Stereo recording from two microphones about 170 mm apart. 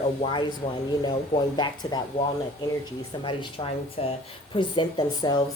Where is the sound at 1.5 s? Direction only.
25° left (ahead or behind).